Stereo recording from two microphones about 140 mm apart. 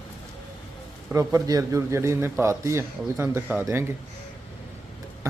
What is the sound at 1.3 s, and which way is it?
A man's voice, 25° right (ahead or behind).